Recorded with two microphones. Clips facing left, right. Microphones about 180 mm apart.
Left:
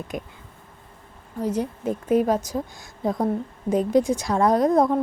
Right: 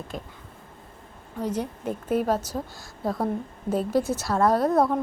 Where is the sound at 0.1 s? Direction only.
15° left (ahead or behind).